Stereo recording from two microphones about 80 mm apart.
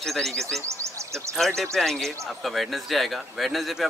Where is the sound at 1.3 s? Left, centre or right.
Centre.